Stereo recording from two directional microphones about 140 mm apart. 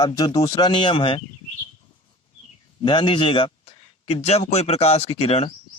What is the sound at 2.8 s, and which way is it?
A man's voice, 35° left (ahead or behind).